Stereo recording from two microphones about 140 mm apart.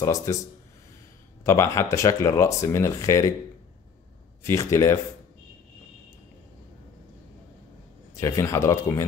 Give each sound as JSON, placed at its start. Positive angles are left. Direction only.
{"t": 0.0, "sound": "speech", "side_deg": 20}
{"t": 1.4, "sound": "speech", "side_deg": 20}
{"t": 4.4, "sound": "speech", "side_deg": 20}
{"t": 8.2, "sound": "speech", "side_deg": 20}